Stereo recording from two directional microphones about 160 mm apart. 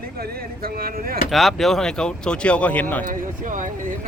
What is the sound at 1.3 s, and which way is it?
Speech, centre (ahead or behind).